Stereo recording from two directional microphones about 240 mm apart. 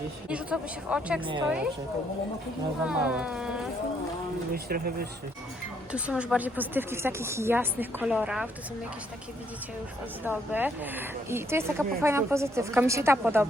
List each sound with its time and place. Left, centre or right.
0.3 s speech: centre
1.2 s a woman's voice: right
2.8 s speech: centre
4.5 s speech: right
5.9 s speech: centre
10.2 s speech: centre